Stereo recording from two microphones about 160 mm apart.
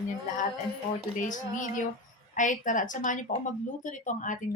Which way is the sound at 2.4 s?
55° left (ahead or behind).